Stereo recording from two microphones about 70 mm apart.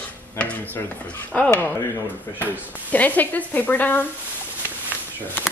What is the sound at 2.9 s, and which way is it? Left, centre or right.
Speech, left.